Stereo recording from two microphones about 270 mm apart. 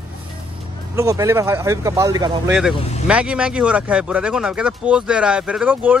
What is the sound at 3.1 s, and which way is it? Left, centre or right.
Speech, centre.